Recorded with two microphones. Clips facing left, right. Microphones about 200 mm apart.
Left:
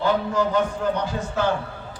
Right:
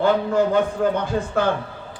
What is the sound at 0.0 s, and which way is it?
Speech, 55° right (ahead or behind).